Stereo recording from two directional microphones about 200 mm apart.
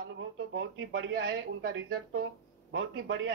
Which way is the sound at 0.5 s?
60° right (ahead or behind).